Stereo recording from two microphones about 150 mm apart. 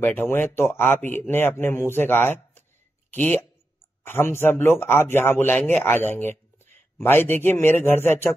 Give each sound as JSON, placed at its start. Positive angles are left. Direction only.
{"t": 0.0, "sound": "speech", "side_deg": 15}